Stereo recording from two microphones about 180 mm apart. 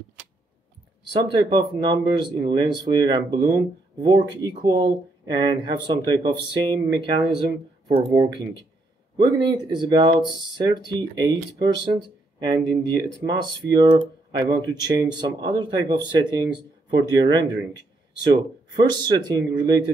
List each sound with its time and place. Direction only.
1.1 s speech: 25° right (ahead or behind)